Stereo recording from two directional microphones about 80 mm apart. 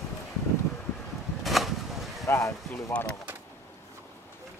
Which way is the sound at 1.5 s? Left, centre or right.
Centre.